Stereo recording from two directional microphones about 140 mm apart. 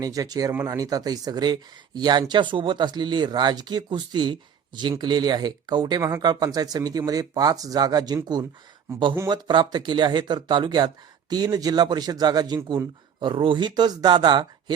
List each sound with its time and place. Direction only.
0.0 s speech: 25° right (ahead or behind)
6.0 s speech: 20° right (ahead or behind)